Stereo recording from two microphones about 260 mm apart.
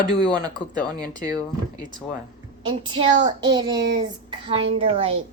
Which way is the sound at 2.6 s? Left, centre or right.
Centre.